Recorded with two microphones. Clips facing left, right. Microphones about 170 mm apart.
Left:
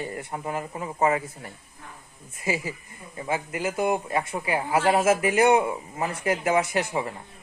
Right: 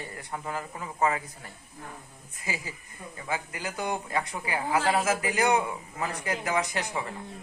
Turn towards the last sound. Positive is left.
turn(degrees=25)  # may be behind; listen again after turning